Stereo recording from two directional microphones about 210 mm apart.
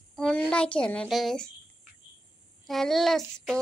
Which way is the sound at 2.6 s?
Centre (ahead or behind).